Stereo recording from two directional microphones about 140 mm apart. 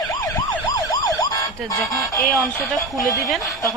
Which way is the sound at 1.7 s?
20° left (ahead or behind).